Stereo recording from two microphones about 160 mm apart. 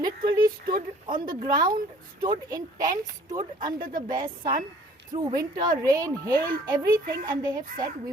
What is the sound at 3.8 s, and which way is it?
Speech, 60° right (ahead or behind).